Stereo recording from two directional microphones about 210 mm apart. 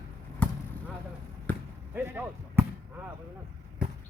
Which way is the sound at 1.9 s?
10° right (ahead or behind).